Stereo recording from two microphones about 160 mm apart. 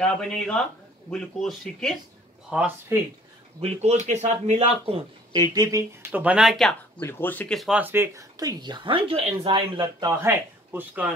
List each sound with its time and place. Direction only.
0.0 s speech: 5° left (ahead or behind)
2.5 s speech: 10° right (ahead or behind)
3.6 s a man's voice: 45° right (ahead or behind); by 6.8 s centre (ahead or behind)
7.0 s speech: 15° left (ahead or behind); by 11.1 s 10° right (ahead or behind)